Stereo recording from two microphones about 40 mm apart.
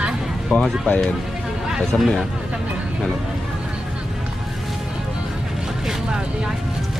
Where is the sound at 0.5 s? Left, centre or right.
Left.